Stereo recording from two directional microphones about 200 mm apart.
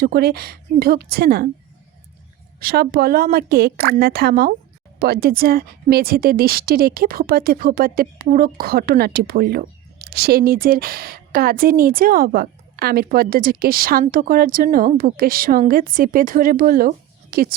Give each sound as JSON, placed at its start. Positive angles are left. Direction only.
{"t": 0.0, "sound": "speech", "side_deg": -50}
{"t": 2.6, "sound": "speech", "side_deg": -50}